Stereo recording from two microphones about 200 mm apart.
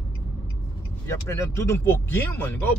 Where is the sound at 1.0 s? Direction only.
15° left (ahead or behind).